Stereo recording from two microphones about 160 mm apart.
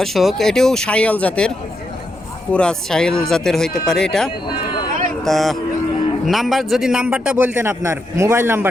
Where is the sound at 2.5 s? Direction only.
5° left (ahead or behind).